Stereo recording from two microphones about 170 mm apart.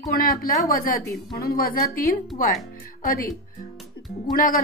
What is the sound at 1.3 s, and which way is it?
A woman's voice, 65° left (ahead or behind).